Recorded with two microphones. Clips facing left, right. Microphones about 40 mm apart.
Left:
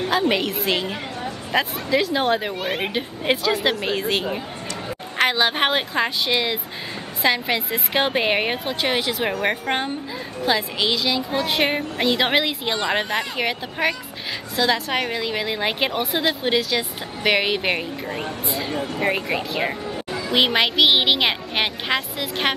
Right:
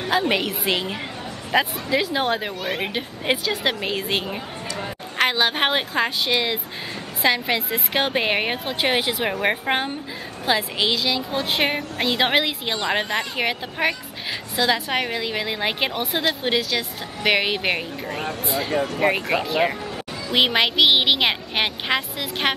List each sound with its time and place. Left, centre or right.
0.3 s a woman's voice: centre
2.6 s speech: centre
2.9 s a woman's voice: centre
8.8 s a woman's voice: centre
20.3 s a woman's voice: centre